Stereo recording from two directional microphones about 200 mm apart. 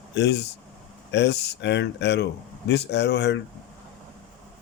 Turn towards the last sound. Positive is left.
turn(degrees=60)  # may be behind; listen again after turning